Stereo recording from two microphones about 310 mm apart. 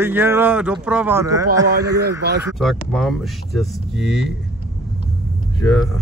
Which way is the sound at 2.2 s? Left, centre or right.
Right.